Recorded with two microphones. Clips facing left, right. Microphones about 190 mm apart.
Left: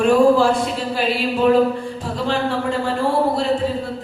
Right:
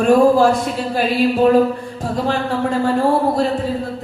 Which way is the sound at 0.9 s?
45° right (ahead or behind).